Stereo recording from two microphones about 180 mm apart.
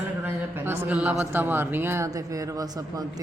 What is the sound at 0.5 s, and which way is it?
Speech, 15° right (ahead or behind).